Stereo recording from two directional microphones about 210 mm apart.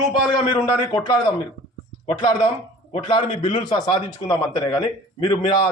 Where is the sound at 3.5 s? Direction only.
20° left (ahead or behind).